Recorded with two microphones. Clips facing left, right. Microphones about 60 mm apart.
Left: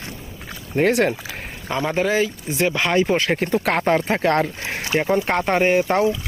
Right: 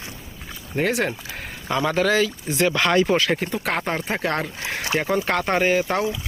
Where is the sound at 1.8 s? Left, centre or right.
Centre.